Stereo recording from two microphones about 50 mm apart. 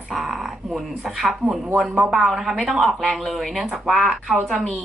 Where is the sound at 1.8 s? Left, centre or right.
Centre.